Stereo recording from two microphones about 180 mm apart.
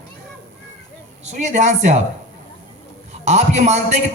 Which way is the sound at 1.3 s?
40° right (ahead or behind).